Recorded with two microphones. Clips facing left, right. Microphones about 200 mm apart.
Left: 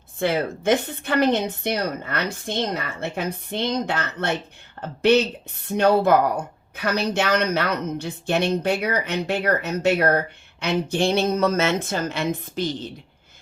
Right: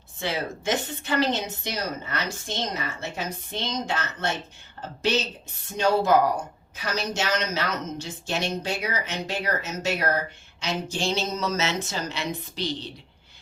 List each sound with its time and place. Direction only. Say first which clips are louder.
0.2 s a woman's voice: left 7 dB; 55° left (ahead or behind)